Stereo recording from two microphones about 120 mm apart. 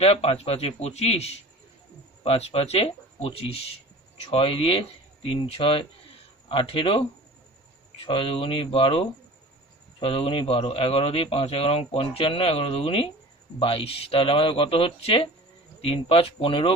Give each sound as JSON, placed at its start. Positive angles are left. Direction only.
{"t": 0.0, "sound": "speech", "side_deg": 55}
{"t": 8.0, "sound": "speech", "side_deg": 45}